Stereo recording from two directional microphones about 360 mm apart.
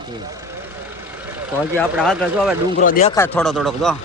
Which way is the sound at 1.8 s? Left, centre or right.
Centre.